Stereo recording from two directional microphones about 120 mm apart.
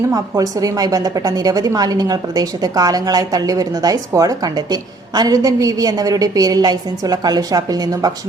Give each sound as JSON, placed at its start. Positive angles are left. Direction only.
{"t": 0.1, "sound": "a woman's voice", "side_deg": -30}